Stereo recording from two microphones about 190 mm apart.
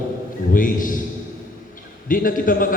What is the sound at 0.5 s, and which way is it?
Speech, 45° left (ahead or behind).